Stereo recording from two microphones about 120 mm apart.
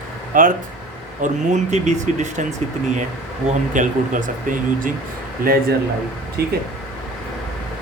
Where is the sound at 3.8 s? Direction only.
90° right.